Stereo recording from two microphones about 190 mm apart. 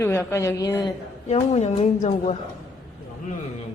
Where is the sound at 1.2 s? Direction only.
35° left (ahead or behind).